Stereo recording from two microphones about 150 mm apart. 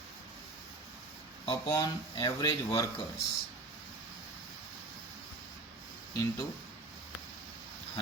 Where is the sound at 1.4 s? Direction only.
25° left (ahead or behind).